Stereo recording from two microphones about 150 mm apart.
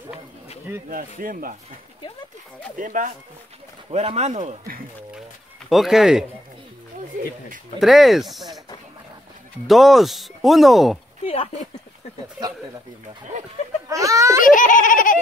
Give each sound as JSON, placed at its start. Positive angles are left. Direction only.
{"t": 0.8, "sound": "speech", "side_deg": -70}
{"t": 2.8, "sound": "speech", "side_deg": -60}
{"t": 3.9, "sound": "speech", "side_deg": -45}
{"t": 5.7, "sound": "speech", "side_deg": 0}
{"t": 7.8, "sound": "speech", "side_deg": 0}
{"t": 9.7, "sound": "speech", "side_deg": 0}
{"t": 13.8, "sound": "speech", "side_deg": -20}
{"t": 14.4, "sound": "baby laughter", "side_deg": 60}